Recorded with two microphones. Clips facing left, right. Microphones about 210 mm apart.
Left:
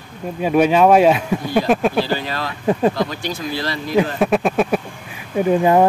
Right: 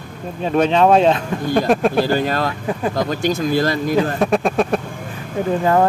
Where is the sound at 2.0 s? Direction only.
50° right (ahead or behind).